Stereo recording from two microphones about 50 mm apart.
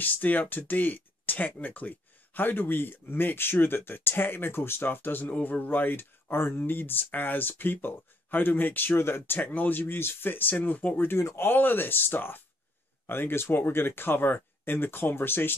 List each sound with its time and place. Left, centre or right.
0.0 s speech: left
5.2 s speech: left
9.4 s speech: left
11.1 s speech: left
11.4 s speech: left